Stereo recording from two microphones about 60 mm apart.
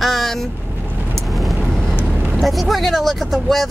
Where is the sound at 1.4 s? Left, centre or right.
Centre.